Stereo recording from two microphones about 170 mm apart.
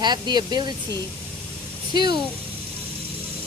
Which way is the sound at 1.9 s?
25° right (ahead or behind).